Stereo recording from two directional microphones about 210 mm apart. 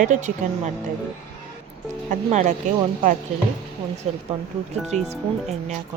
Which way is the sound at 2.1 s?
35° right (ahead or behind).